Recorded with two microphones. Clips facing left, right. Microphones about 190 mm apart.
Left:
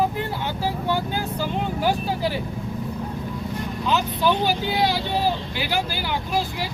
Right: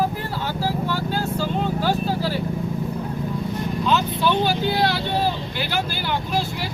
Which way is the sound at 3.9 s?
15° left (ahead or behind).